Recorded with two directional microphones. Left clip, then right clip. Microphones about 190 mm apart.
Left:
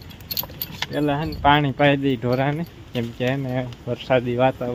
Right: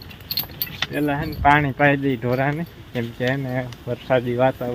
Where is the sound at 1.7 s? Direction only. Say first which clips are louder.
Even; 5° left (ahead or behind).